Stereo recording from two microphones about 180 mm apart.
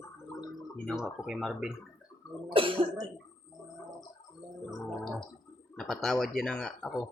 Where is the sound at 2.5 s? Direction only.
30° right (ahead or behind).